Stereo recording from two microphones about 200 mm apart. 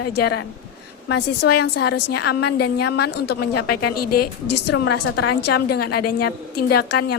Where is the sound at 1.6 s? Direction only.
55° left (ahead or behind).